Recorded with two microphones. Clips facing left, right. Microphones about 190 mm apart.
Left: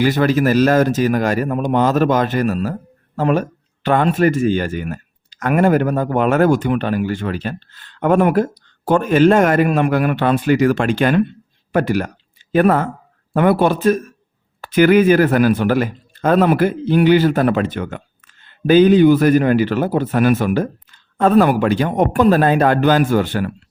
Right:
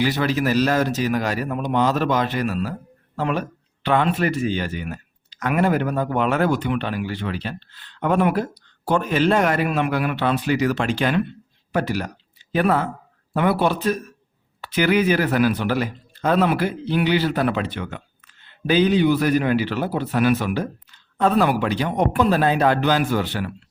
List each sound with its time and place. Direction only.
0.0 s speech: 50° left (ahead or behind)